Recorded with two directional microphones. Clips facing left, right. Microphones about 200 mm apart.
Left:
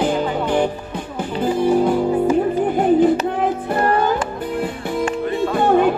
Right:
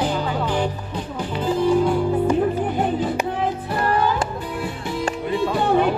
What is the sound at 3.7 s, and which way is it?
Music, 50° left (ahead or behind).